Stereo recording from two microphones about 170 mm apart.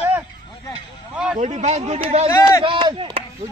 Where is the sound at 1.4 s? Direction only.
40° right (ahead or behind).